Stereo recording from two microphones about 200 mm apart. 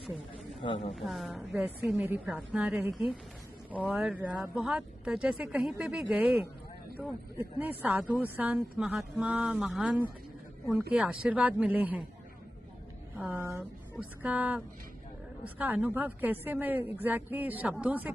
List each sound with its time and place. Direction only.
0.6 s a woman's voice: 25° left (ahead or behind)
0.9 s speech: centre (ahead or behind)
13.3 s speech: 15° right (ahead or behind)